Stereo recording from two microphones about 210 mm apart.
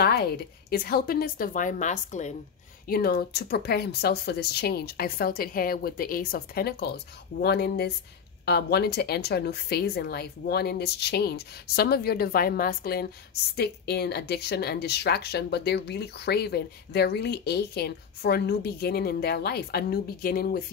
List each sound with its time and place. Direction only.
0.0 s a woman's voice: 50° left (ahead or behind)
2.9 s a woman's voice: 45° left (ahead or behind)